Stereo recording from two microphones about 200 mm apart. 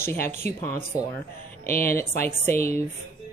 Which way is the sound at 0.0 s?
10° left (ahead or behind).